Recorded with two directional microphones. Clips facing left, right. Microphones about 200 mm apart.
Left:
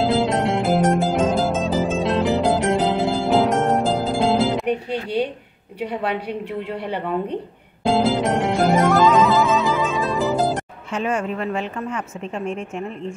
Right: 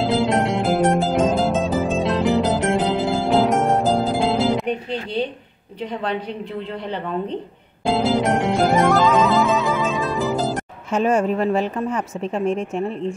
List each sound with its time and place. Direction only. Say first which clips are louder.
0.0 s music: even; centre (ahead or behind)
7.8 s music: even; centre (ahead or behind)
10.9 s speech: right 5 dB; 40° right (ahead or behind)